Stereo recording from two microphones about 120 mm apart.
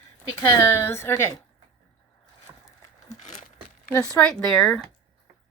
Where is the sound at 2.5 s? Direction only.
25° right (ahead or behind).